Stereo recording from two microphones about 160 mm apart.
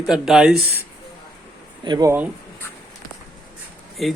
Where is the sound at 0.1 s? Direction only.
5° right (ahead or behind).